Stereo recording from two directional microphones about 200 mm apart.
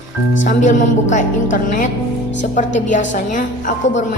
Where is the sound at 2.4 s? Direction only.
40° left (ahead or behind).